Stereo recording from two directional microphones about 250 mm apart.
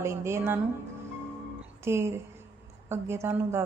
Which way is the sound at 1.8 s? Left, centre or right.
Centre.